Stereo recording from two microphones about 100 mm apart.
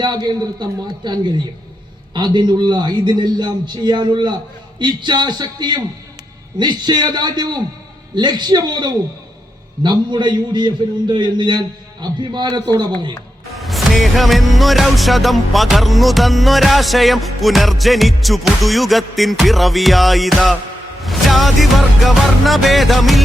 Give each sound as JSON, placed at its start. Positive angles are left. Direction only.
{"t": 0.0, "sound": "a man's voice", "side_deg": -45}
{"t": 13.5, "sound": "music", "side_deg": 0}